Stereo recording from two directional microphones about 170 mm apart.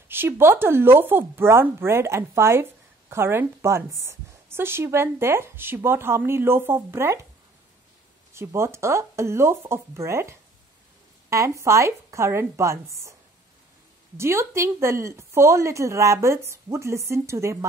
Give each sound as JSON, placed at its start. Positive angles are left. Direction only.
{"t": 0.1, "sound": "speech", "side_deg": -15}
{"t": 8.3, "sound": "speech", "side_deg": -15}
{"t": 14.1, "sound": "speech", "side_deg": -15}